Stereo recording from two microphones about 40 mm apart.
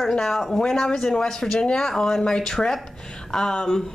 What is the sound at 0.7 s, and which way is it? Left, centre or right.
Speech, centre.